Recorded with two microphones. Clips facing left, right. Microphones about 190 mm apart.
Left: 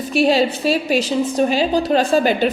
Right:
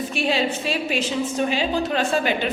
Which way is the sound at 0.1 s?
40° left (ahead or behind).